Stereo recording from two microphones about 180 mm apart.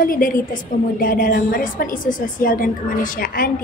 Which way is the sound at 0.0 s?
50° left (ahead or behind).